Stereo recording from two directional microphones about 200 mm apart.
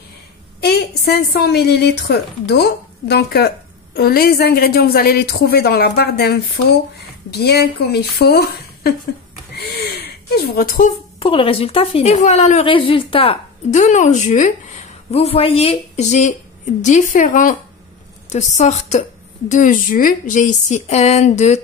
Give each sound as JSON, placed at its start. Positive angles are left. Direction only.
{"t": 0.6, "sound": "a woman's voice", "side_deg": 55}
{"t": 9.6, "sound": "a sound", "side_deg": 55}
{"t": 11.1, "sound": "a woman's voice", "side_deg": 30}